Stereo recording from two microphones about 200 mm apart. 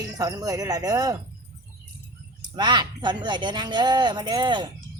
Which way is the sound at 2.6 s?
20° right (ahead or behind).